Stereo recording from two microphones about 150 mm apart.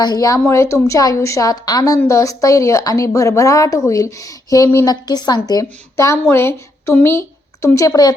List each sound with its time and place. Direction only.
0.0 s a woman's voice: 25° left (ahead or behind)